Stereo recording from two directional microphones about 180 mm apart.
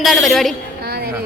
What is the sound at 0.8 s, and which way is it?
Music, 65° right (ahead or behind).